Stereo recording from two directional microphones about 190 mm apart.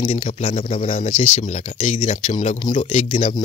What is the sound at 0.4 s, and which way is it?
Speech, 30° left (ahead or behind).